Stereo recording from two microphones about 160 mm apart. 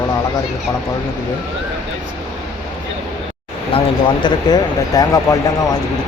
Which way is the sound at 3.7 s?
35° left (ahead or behind).